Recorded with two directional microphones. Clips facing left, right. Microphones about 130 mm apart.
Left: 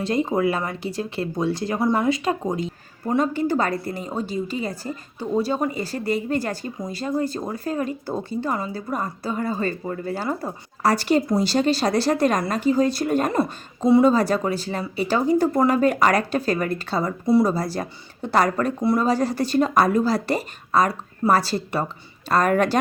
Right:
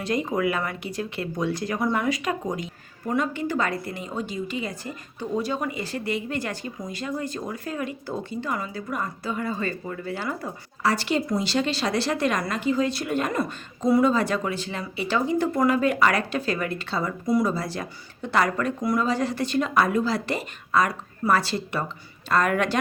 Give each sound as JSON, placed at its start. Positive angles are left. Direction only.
{"t": 0.0, "sound": "speech", "side_deg": 30}